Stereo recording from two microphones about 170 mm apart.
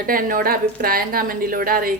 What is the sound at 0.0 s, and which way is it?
A woman's voice, 55° right (ahead or behind).